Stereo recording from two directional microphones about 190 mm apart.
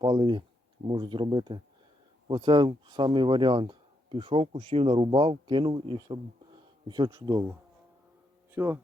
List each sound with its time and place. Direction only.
0.0 s speech: 25° right (ahead or behind)
8.5 s speech: 10° right (ahead or behind)